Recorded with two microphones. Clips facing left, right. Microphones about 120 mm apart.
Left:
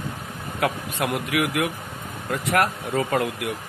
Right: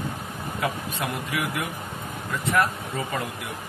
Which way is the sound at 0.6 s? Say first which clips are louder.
Left 4 dB; 70° left (ahead or behind).